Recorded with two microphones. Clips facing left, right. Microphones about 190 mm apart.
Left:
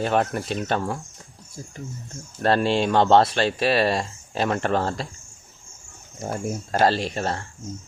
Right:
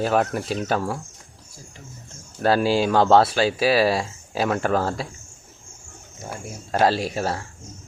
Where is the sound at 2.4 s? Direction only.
5° right (ahead or behind).